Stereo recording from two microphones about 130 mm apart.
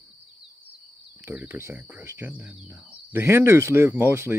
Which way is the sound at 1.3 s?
10° right (ahead or behind).